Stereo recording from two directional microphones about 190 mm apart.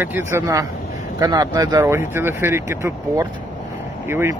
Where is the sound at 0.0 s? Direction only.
10° right (ahead or behind).